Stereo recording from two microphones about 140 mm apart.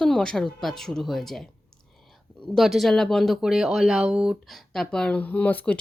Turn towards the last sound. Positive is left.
turn(degrees=10)  # may be behind; listen again after turning